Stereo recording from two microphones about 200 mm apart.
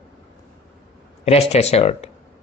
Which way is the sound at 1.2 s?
30° left (ahead or behind).